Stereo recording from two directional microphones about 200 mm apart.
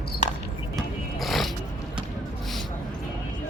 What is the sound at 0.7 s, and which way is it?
Music, centre (ahead or behind).